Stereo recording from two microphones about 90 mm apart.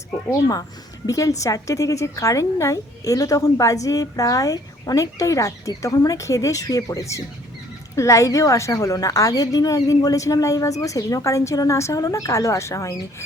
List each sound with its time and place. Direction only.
0.3 s a woman's voice: 40° left (ahead or behind)